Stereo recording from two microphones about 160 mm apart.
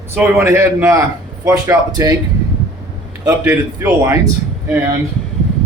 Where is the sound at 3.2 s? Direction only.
15° right (ahead or behind).